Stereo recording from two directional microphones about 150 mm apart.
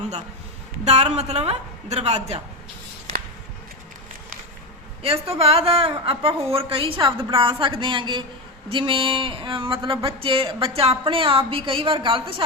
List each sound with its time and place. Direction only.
0.9 s a woman's voice: 45° right (ahead or behind)
5.0 s a woman's voice: 40° right (ahead or behind)